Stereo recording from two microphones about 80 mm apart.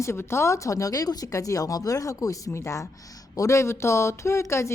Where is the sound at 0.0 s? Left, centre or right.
Left.